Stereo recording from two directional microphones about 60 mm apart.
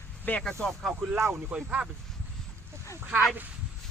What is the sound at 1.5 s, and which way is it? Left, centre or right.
Speech, centre.